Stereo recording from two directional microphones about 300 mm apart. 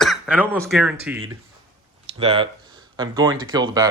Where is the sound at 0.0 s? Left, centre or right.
Centre.